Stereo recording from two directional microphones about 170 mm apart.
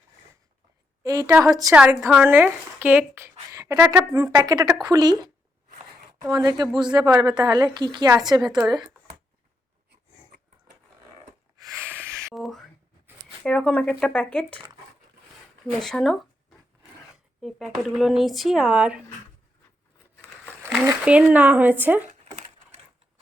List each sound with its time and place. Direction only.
1.0 s speech: 20° right (ahead or behind)
2.0 s speech: centre (ahead or behind)
2.2 s speech: 10° right (ahead or behind)
6.3 s speech: 20° right (ahead or behind)
8.4 s speech: centre (ahead or behind)
11.6 s snort: 15° right (ahead or behind)
12.3 s speech: centre (ahead or behind)
15.8 s speech: centre (ahead or behind)
17.4 s speech: centre (ahead or behind)
20.6 s speech: 10° right (ahead or behind)